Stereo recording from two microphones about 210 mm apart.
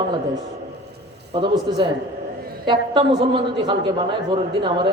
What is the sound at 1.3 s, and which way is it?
A man's voice, 30° right (ahead or behind).